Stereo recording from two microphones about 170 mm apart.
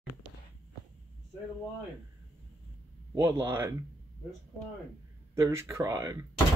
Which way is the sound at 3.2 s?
15° right (ahead or behind).